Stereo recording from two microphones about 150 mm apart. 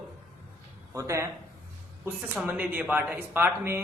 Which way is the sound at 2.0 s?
10° right (ahead or behind).